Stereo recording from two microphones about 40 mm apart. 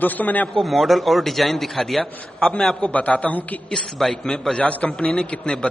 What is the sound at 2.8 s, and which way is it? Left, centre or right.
Speech, left.